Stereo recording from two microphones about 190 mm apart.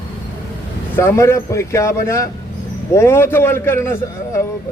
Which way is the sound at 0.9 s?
15° left (ahead or behind).